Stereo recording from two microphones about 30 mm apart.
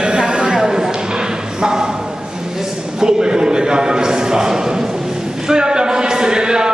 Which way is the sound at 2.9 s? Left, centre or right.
Right.